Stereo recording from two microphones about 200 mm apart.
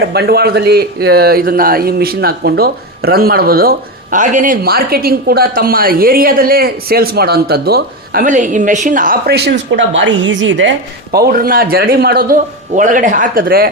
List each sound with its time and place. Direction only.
0.0 s speech: 55° right (ahead or behind)
11.1 s speech: 50° right (ahead or behind)